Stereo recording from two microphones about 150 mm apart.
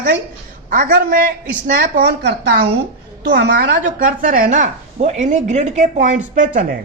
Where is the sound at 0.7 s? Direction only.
65° right (ahead or behind); by 2.6 s 90° right.